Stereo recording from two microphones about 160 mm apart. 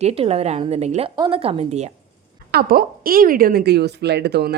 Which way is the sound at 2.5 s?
70° right (ahead or behind).